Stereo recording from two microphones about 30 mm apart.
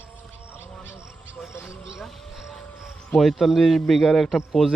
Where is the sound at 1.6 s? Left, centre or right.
Centre.